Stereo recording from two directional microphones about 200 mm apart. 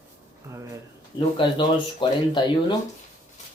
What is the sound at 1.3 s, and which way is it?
Speech, 25° left (ahead or behind).